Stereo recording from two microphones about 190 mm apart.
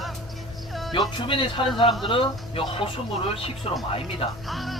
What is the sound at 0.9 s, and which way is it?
Speech, 25° left (ahead or behind).